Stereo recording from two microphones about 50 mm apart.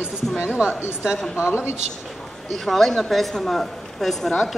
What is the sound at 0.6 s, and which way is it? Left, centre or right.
Speech, centre.